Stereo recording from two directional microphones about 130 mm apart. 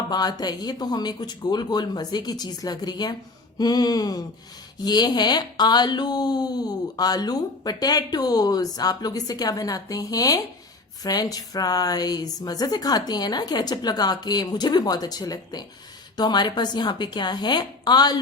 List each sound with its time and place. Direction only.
0.1 s speech: 30° left (ahead or behind)